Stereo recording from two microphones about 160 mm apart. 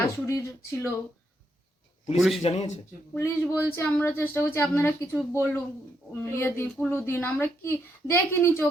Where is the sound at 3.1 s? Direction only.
15° left (ahead or behind).